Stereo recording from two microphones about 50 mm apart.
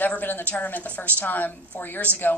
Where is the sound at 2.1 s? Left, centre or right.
Right.